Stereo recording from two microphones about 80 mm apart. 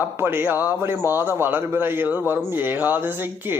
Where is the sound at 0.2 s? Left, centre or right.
Right.